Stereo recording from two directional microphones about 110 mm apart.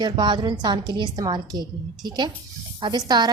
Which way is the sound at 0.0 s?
45° right (ahead or behind).